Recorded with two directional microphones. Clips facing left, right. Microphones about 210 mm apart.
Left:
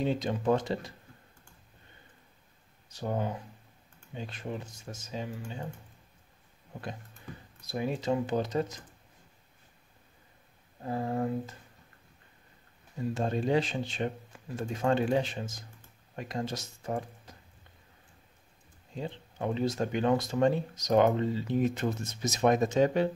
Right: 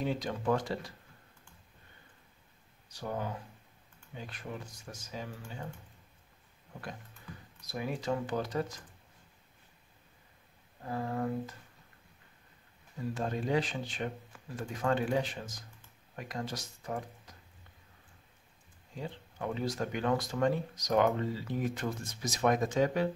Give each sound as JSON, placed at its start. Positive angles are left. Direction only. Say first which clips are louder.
{"t": 0.0, "sound": "speech", "louder": "left 4 dB", "side_deg": 25}
{"t": 2.9, "sound": "speech", "louder": "left 4 dB", "side_deg": 25}
{"t": 7.6, "sound": "speech", "louder": "left 4 dB", "side_deg": 25}
{"t": 10.9, "sound": "speech", "louder": "left 3 dB", "side_deg": 25}
{"t": 13.1, "sound": "speech", "louder": "left 4 dB", "side_deg": 25}
{"t": 18.9, "sound": "speech", "louder": "left 4 dB", "side_deg": 25}